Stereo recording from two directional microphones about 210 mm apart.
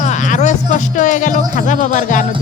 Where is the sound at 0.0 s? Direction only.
35° left (ahead or behind).